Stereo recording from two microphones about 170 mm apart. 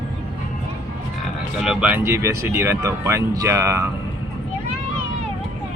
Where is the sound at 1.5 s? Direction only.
5° right (ahead or behind).